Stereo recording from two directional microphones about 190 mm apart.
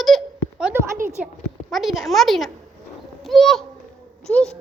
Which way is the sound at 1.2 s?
5° right (ahead or behind).